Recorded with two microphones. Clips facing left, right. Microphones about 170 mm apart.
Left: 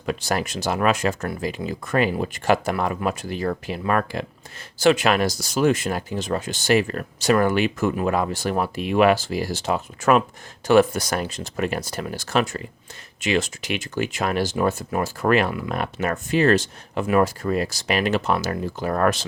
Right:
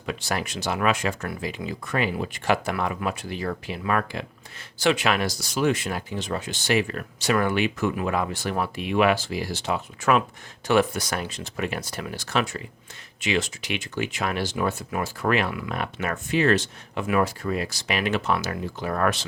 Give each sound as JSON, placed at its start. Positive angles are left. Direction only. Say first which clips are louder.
{"t": 0.0, "sound": "speech", "louder": "left 4 dB", "side_deg": 45}